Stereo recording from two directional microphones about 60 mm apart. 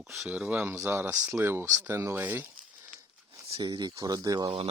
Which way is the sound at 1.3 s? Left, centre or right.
Right.